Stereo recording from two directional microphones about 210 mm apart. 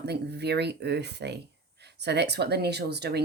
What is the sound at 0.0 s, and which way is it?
Speech, 50° right (ahead or behind).